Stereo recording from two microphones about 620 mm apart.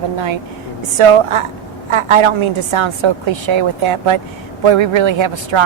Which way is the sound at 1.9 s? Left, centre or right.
Right.